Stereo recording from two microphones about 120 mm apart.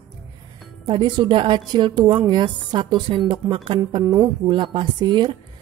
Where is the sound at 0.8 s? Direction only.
40° right (ahead or behind).